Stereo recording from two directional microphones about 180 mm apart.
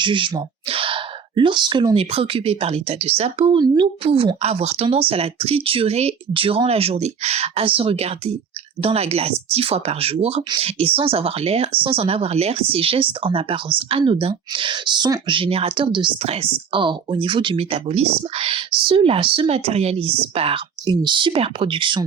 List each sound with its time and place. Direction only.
0.0 s speech: 25° right (ahead or behind)